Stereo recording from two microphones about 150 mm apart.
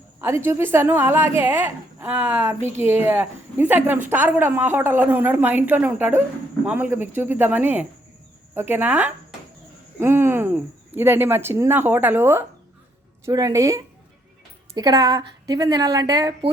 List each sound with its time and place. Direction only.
0.2 s a woman's voice: 15° right (ahead or behind)